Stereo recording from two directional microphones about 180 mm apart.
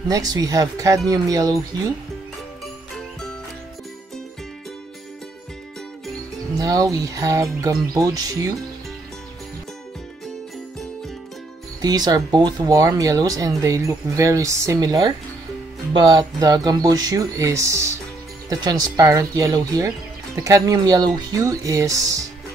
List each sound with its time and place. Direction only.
0.1 s speech: 20° right (ahead or behind)
6.5 s music: 20° right (ahead or behind)
7.9 s speech: 20° right (ahead or behind)
11.8 s speech: 20° right (ahead or behind)